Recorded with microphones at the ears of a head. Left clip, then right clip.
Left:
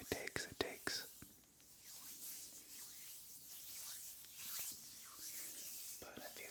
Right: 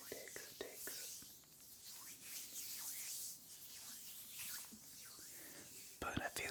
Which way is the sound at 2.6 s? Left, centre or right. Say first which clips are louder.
Right 7 dB; right.